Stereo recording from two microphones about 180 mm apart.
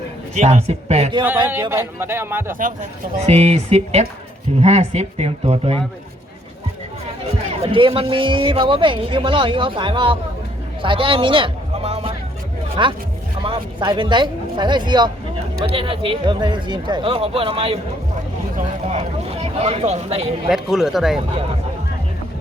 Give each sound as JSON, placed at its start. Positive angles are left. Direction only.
{"t": 0.3, "sound": "speech", "side_deg": -40}
{"t": 1.7, "sound": "speech", "side_deg": -10}
{"t": 3.2, "sound": "speech", "side_deg": -35}
{"t": 7.5, "sound": "a man's voice", "side_deg": -30}
{"t": 20.5, "sound": "speech", "side_deg": 0}